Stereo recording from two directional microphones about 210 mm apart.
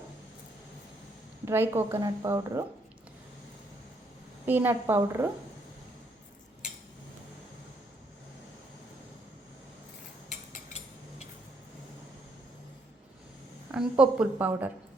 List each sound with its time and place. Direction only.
1.5 s a woman's voice: 10° right (ahead or behind)
4.4 s a woman's voice: 10° right (ahead or behind)
10.2 s cutlery: 35° left (ahead or behind)
13.7 s a woman's voice: 5° right (ahead or behind)